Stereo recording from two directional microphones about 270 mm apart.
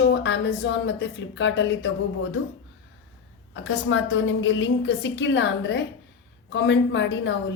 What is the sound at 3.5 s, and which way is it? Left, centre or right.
A woman's voice, left.